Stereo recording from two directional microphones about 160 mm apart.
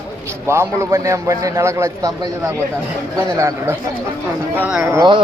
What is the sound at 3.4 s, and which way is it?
A man's voice, 20° right (ahead or behind).